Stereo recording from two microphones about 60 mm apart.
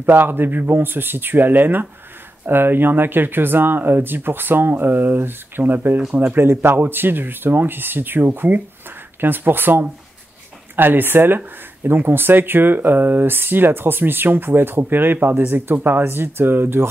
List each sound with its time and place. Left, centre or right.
0.0 s speech: right